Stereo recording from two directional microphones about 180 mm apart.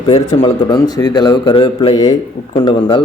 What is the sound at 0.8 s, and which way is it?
A man's voice, 20° left (ahead or behind).